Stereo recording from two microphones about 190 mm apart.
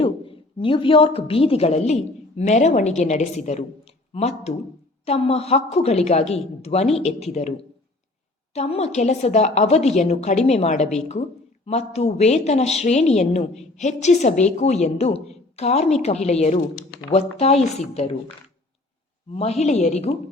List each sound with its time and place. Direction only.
0.6 s a woman's voice: 25° left (ahead or behind)
8.5 s a woman's voice: 35° left (ahead or behind)
19.4 s a woman's voice: 35° left (ahead or behind)